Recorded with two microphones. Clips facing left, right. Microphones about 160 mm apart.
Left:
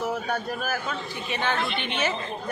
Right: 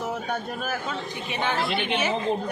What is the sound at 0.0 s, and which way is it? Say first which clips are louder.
A man's voice: left 1 dB; 20° right (ahead or behind).